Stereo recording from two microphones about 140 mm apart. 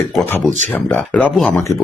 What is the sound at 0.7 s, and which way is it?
Speech, 10° left (ahead or behind).